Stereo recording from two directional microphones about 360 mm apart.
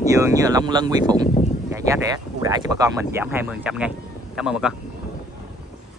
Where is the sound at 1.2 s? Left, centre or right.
Centre.